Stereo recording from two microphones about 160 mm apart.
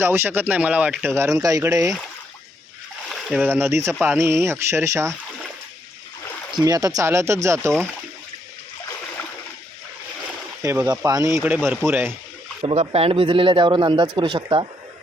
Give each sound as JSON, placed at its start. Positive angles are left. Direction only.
{"t": 0.0, "sound": "speech", "side_deg": -15}
{"t": 3.1, "sound": "speech", "side_deg": -5}
{"t": 6.5, "sound": "speech", "side_deg": -25}
{"t": 10.6, "sound": "speech", "side_deg": -20}
{"t": 12.6, "sound": "speech", "side_deg": -35}